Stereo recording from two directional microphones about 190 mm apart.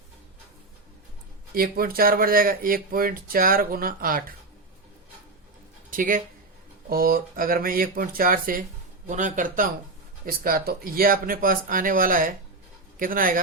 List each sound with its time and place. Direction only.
1.5 s speech: 50° right (ahead or behind)
5.9 s speech: 45° right (ahead or behind)